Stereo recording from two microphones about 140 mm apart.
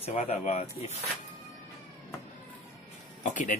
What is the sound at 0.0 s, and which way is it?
Speech, 50° left (ahead or behind).